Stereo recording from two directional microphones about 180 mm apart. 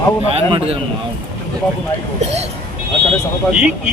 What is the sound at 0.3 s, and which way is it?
Speech, 35° right (ahead or behind).